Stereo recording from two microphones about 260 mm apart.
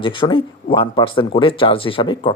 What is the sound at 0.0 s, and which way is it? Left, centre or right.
Speech, centre.